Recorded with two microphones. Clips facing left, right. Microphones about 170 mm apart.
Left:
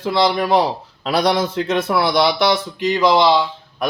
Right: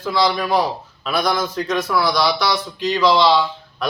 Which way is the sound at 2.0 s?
25° left (ahead or behind).